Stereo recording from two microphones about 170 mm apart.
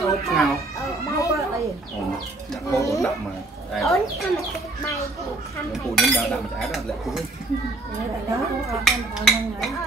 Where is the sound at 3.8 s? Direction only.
Centre (ahead or behind).